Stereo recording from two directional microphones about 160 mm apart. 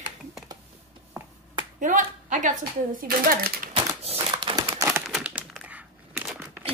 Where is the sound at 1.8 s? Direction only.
55° right (ahead or behind).